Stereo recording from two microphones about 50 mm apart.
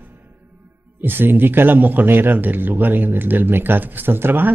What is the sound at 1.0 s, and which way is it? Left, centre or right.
Speech, right.